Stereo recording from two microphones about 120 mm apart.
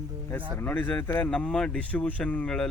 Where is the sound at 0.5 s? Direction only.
15° left (ahead or behind).